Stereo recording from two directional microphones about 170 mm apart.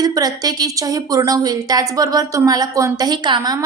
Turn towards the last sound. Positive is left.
turn(degrees=-25)  # may be behind; listen again after turning